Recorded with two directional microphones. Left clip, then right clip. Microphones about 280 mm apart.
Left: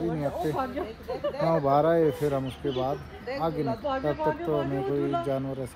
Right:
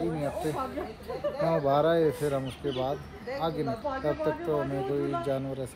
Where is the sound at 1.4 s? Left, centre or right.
Left.